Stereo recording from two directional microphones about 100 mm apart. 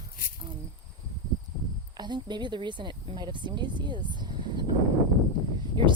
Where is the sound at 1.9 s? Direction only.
45° right (ahead or behind).